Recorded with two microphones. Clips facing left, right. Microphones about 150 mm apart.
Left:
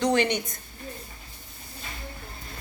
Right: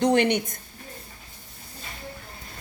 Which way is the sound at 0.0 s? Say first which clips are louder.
Right 3 dB; 60° right (ahead or behind).